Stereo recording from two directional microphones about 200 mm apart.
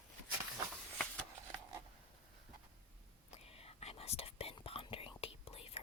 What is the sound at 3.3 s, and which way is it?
Whispering, 30° left (ahead or behind).